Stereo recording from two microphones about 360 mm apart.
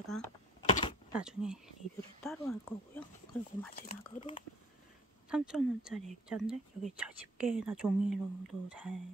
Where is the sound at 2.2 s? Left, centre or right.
Centre.